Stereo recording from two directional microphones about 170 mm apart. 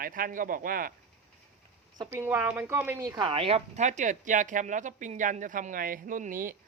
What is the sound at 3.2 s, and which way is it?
Speech, 30° right (ahead or behind).